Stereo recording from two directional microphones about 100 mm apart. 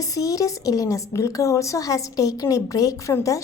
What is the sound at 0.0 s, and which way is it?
Speech, 35° left (ahead or behind).